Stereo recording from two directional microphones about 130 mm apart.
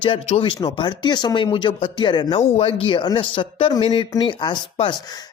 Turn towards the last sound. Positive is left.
turn(degrees=35)  # may be behind; listen again after turning